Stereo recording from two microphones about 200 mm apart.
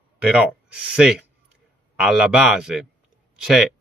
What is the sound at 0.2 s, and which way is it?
Speech, 5° right (ahead or behind).